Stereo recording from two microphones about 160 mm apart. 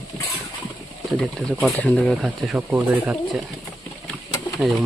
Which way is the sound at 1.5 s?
5° left (ahead or behind).